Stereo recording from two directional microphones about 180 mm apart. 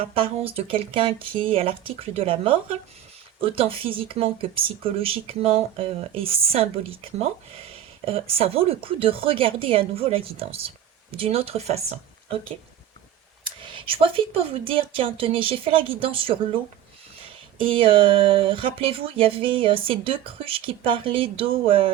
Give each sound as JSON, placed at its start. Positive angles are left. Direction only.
{"t": 0.0, "sound": "speech", "side_deg": -30}
{"t": 13.6, "sound": "speech", "side_deg": -30}
{"t": 17.6, "sound": "speech", "side_deg": -30}